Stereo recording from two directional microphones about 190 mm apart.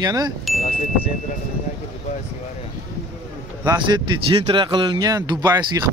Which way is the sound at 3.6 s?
25° right (ahead or behind).